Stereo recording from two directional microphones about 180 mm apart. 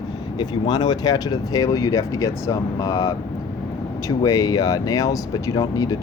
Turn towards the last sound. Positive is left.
turn(degrees=20)  # may be behind; listen again after turning